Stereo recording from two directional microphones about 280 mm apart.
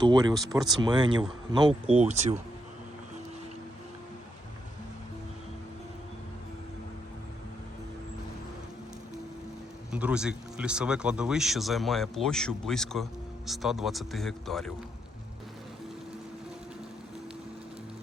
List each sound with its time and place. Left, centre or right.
0.0 s speech: centre
9.9 s speech: centre